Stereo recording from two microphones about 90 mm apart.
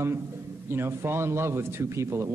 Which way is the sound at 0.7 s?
30° right (ahead or behind).